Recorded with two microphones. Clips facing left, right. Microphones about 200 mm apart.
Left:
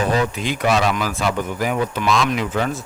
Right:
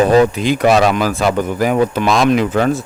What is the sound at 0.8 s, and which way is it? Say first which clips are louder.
Speech: right 6 dB; 65° right (ahead or behind).